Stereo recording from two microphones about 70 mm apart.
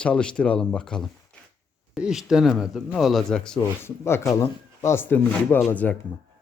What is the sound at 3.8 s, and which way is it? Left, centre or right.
Speech, left.